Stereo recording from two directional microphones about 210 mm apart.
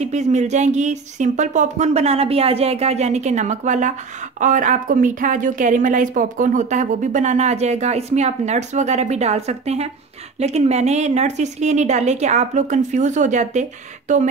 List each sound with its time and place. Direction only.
0.0 s speech: 35° right (ahead or behind)